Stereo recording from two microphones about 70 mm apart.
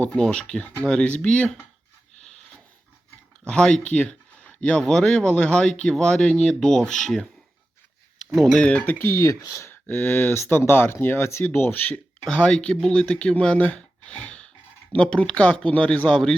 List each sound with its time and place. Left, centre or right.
0.0 s speech: centre
3.4 s speech: centre
8.3 s speech: centre
8.5 s speech: centre
9.1 s speech: left
9.8 s speech: left
10.3 s speech: left
12.3 s speech: centre
12.9 s speech: centre